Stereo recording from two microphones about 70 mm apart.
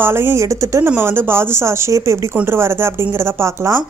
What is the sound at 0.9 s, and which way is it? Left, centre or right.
Speech, right.